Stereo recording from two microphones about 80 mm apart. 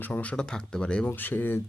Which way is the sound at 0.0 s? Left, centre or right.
Centre.